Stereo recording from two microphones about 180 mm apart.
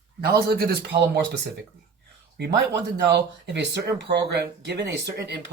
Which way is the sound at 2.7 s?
70° right (ahead or behind).